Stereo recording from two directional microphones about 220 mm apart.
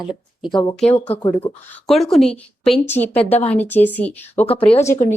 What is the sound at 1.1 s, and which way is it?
Speech, 20° left (ahead or behind).